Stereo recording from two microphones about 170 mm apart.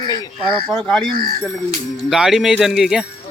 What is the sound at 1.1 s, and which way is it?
Speech, 60° right (ahead or behind).